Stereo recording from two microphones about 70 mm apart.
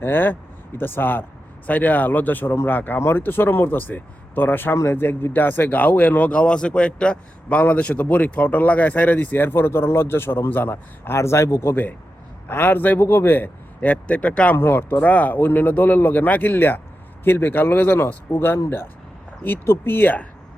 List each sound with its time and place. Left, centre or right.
0.0 s speech: left
14.5 s speech: left